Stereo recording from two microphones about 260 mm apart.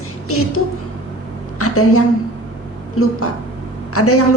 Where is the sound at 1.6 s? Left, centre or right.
Left.